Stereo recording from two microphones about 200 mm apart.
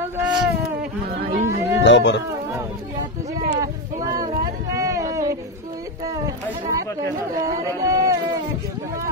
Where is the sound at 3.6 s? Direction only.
15° right (ahead or behind).